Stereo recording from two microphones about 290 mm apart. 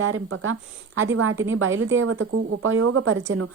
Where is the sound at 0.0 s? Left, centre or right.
Right.